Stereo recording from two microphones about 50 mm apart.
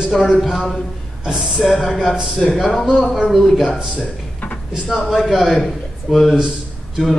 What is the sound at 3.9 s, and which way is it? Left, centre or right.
Drawer open or close, left.